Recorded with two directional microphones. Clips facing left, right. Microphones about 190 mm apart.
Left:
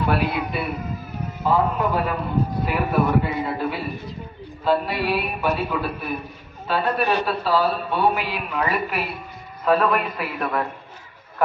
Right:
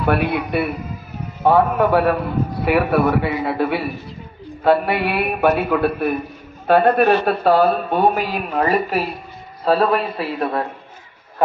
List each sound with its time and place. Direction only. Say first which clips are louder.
0.0 s a man's voice: right 4 dB; 60° right (ahead or behind); by 10.6 s 30° right (ahead or behind)